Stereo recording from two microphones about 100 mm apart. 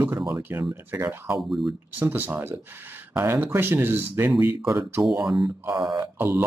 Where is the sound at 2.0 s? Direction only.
20° right (ahead or behind).